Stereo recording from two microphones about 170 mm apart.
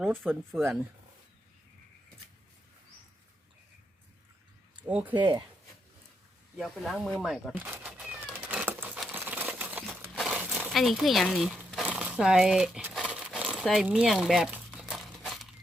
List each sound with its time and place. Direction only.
0.5 s speech: centre (ahead or behind)
4.9 s speech: 10° right (ahead or behind)
5.1 s speech: 25° right (ahead or behind)
6.6 s speech: centre (ahead or behind)
7.5 s cat: 10° right (ahead or behind)
9.1 s crumpling: 10° right (ahead or behind)